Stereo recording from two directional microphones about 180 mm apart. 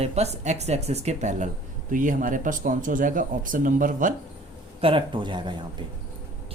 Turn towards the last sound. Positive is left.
turn(degrees=-25)  # may be behind; listen again after turning